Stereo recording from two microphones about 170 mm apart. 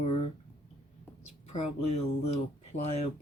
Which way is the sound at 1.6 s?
35° left (ahead or behind).